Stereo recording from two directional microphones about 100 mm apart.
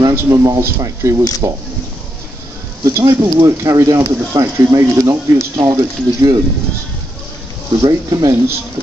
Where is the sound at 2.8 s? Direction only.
35° right (ahead or behind).